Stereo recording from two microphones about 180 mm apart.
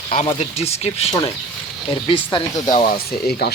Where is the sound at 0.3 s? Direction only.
35° left (ahead or behind).